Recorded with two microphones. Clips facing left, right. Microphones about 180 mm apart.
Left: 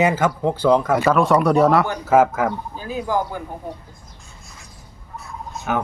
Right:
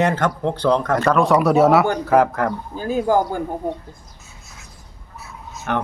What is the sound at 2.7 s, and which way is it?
Speech, 45° right (ahead or behind).